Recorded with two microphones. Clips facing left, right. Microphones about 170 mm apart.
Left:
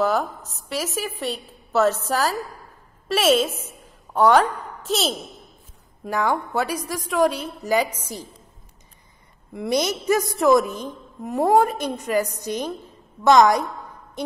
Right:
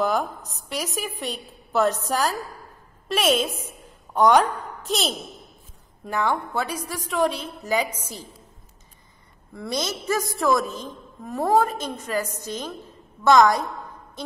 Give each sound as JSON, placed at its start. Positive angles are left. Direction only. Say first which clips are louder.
{"t": 0.0, "sound": "a woman's voice", "louder": "left 2 dB", "side_deg": 0}
{"t": 9.5, "sound": "a woman's voice", "louder": "left 6 dB", "side_deg": 20}
{"t": 14.2, "sound": "music", "louder": "left 6 dB", "side_deg": 20}